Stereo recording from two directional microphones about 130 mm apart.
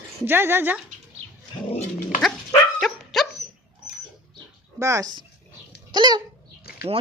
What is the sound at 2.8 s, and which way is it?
Dog, centre (ahead or behind).